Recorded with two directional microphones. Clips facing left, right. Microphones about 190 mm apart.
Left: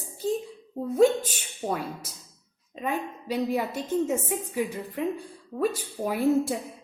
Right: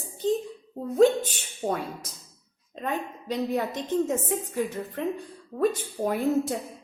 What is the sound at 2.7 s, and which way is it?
A woman's voice, 5° left (ahead or behind).